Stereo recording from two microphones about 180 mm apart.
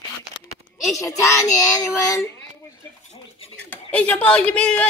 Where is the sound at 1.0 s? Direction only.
15° left (ahead or behind).